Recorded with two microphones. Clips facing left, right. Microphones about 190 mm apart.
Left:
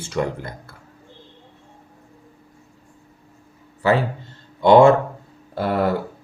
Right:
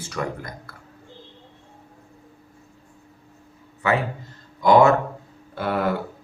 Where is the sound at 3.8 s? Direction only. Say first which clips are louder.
Left 4 dB; 30° left (ahead or behind).